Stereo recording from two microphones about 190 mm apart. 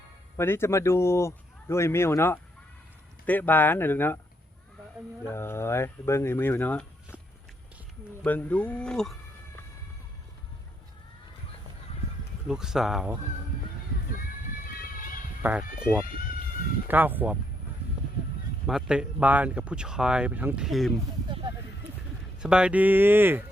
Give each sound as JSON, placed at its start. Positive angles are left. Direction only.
{"t": 0.3, "sound": "speech", "side_deg": 15}
{"t": 5.3, "sound": "speech", "side_deg": 10}
{"t": 8.2, "sound": "speech", "side_deg": 10}
{"t": 12.5, "sound": "speech", "side_deg": -5}
{"t": 14.8, "sound": "music", "side_deg": 45}
{"t": 15.4, "sound": "speech", "side_deg": -5}
{"t": 18.6, "sound": "speech", "side_deg": -5}
{"t": 21.2, "sound": "a sound", "side_deg": -25}
{"t": 22.4, "sound": "speech", "side_deg": -5}